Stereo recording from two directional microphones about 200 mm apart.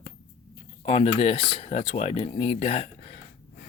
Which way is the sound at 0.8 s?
30° left (ahead or behind).